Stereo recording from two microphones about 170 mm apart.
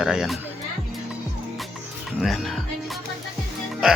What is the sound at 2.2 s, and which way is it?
Music, centre (ahead or behind).